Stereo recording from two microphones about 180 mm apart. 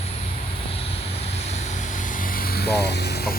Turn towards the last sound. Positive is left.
turn(degrees=60)  # may be behind; listen again after turning